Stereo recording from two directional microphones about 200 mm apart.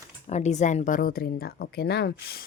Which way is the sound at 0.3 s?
35° left (ahead or behind).